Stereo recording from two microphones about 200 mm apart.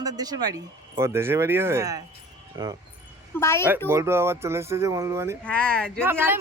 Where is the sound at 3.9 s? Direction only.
10° right (ahead or behind).